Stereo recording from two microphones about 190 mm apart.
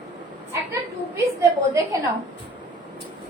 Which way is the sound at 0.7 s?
15° right (ahead or behind).